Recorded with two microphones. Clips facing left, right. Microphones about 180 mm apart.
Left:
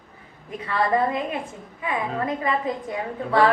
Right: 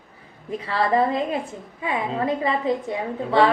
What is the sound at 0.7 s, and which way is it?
Speech, 30° right (ahead or behind).